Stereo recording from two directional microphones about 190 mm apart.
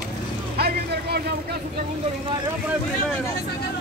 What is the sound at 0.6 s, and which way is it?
Boat, 55° right (ahead or behind).